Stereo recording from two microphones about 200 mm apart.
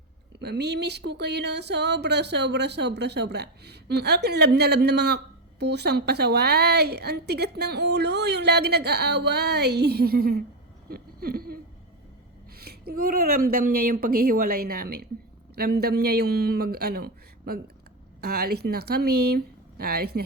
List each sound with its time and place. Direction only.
0.3 s speech: 55° right (ahead or behind)
10.8 s a sound: 50° right (ahead or behind)
12.5 s speech: 50° right (ahead or behind)